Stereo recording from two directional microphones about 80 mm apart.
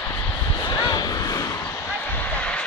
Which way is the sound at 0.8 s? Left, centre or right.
Left.